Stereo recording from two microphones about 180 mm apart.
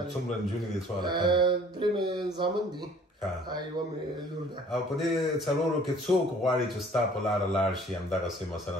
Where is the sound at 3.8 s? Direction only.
20° right (ahead or behind).